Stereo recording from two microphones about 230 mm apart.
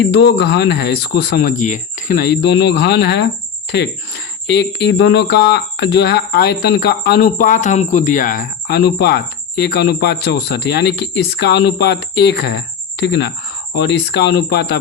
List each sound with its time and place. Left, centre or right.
0.0 s speech: left
4.4 s speech: left